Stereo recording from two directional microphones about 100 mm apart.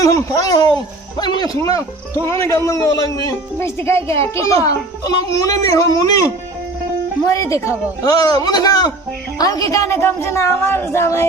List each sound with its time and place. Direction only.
0.0 s a man's voice: 35° left (ahead or behind)
1.6 s a man's voice: 35° left (ahead or behind)
7.3 s a man's voice: 30° left (ahead or behind)